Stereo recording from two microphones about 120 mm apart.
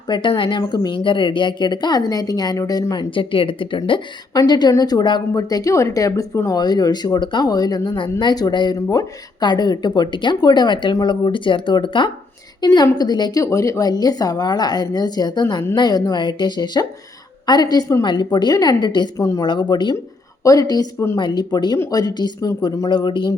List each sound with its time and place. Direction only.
0.1 s a woman's voice: 40° left (ahead or behind)
3.2 s a woman's voice: 45° left (ahead or behind); by 18.0 s 30° left (ahead or behind)
18.0 s a woman's voice: 40° left (ahead or behind)
19.2 s a woman's voice: 25° left (ahead or behind)
19.5 s a woman's voice: 40° left (ahead or behind)
22.9 s a woman's voice: 40° left (ahead or behind)